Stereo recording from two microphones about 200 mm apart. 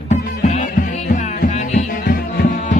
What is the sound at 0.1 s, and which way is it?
Music, 35° left (ahead or behind).